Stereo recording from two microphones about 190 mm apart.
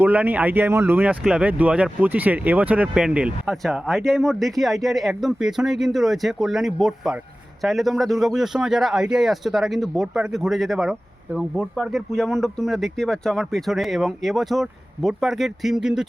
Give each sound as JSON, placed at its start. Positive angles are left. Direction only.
{"t": 0.0, "sound": "speech", "side_deg": -10}